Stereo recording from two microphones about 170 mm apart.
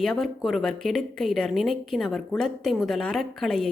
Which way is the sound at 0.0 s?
Centre (ahead or behind).